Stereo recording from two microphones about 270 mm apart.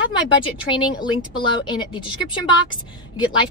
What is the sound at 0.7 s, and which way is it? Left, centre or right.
Speech, centre.